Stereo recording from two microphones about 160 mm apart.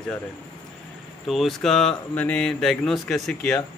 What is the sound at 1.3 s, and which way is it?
A man's voice, centre (ahead or behind).